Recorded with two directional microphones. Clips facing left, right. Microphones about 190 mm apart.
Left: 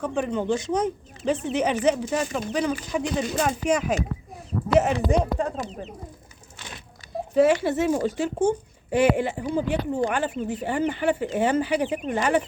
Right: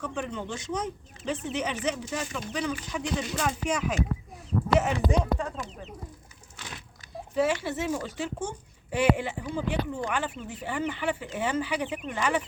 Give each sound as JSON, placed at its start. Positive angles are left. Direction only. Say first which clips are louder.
{"t": 0.0, "sound": "speech", "louder": "left 8 dB", "side_deg": 45}
{"t": 0.7, "sound": "speech", "louder": "left 8 dB", "side_deg": 55}
{"t": 7.5, "sound": "speech", "louder": "left 7 dB", "side_deg": 50}